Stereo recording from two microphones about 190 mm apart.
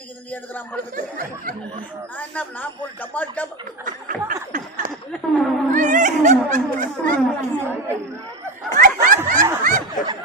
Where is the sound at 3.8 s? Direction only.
45° right (ahead or behind).